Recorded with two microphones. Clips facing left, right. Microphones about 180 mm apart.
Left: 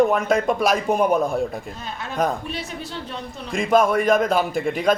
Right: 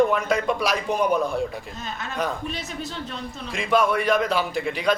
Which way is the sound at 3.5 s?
45° left (ahead or behind).